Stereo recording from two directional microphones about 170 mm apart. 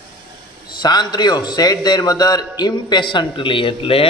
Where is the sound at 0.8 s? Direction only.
25° left (ahead or behind).